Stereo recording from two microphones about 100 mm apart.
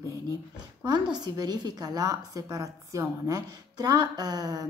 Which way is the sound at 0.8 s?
40° right (ahead or behind).